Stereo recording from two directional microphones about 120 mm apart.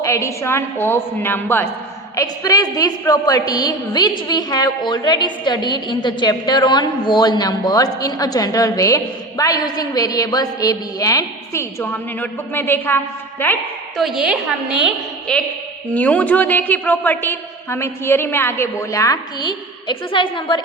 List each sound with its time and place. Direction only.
0.0 s a woman's voice: 25° left (ahead or behind)
2.1 s a woman's voice: 30° left (ahead or behind)
11.8 s a woman's voice: 15° left (ahead or behind)
13.9 s a woman's voice: centre (ahead or behind)
15.3 s a woman's voice: 5° left (ahead or behind); by 20.6 s 40° left (ahead or behind)